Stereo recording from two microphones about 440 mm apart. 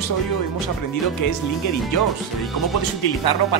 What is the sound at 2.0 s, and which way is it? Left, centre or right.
Speech, centre.